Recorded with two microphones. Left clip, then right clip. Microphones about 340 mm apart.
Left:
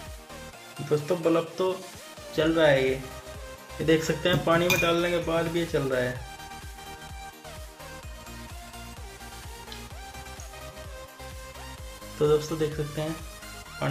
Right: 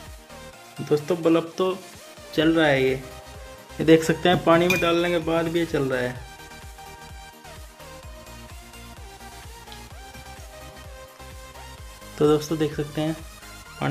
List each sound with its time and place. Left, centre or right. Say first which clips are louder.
0.8 s speech: right 4 dB; right
12.2 s speech: right 3 dB; right